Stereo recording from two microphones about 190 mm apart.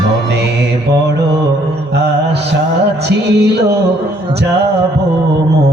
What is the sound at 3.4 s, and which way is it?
Speech, 60° right (ahead or behind).